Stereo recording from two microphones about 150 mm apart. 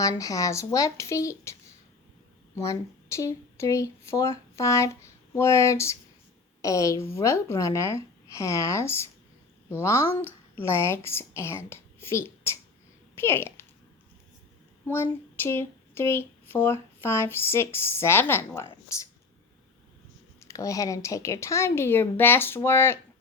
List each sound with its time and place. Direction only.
0.0 s speech: 25° left (ahead or behind)
2.6 s a woman's voice: 20° left (ahead or behind)
14.8 s speech: 15° left (ahead or behind)
20.4 s speech: 20° left (ahead or behind)